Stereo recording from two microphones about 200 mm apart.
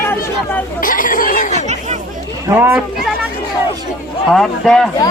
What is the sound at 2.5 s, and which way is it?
Speech, 10° right (ahead or behind).